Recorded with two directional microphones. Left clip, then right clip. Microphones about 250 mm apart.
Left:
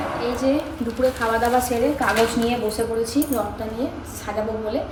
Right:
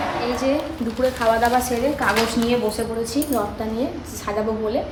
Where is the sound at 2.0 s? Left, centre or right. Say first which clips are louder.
Even; centre.